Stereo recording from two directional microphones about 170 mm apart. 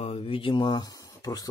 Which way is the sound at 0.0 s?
35° left (ahead or behind).